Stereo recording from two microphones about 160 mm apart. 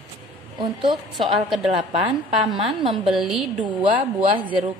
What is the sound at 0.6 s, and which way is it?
Speech, 30° right (ahead or behind).